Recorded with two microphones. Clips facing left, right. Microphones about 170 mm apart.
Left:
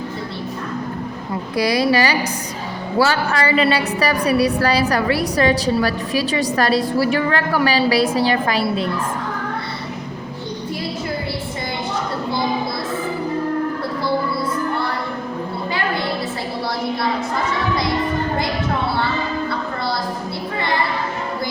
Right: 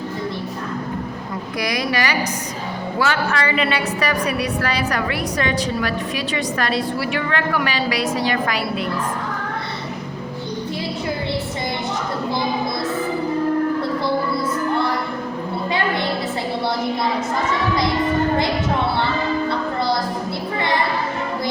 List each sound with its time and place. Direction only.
1.5 s a woman's voice: 30° left (ahead or behind)